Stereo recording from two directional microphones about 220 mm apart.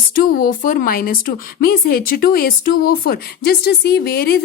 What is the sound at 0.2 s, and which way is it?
A woman's voice, 40° left (ahead or behind).